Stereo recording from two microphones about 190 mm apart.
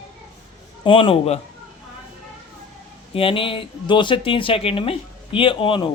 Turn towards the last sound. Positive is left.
turn(degrees=25)  # may be behind; listen again after turning